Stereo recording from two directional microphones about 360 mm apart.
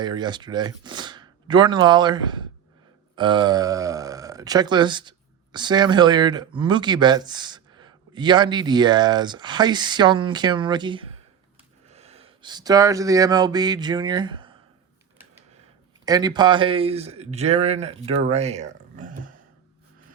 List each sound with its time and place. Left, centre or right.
0.0 s speech: centre
16.0 s speech: centre